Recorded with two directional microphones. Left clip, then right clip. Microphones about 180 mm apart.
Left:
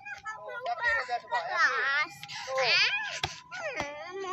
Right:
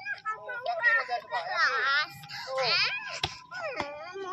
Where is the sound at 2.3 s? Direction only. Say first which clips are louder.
Left 1 dB; 20° left (ahead or behind).